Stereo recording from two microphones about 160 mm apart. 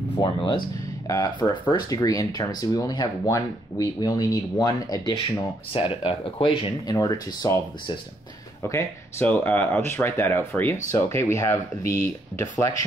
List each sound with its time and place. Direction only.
0.2 s speech: 30° left (ahead or behind)
6.9 s speech: 25° left (ahead or behind)
8.6 s speech: 15° left (ahead or behind)